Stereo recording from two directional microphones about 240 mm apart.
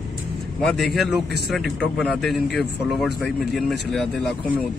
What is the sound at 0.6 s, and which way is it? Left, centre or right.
Speech, centre.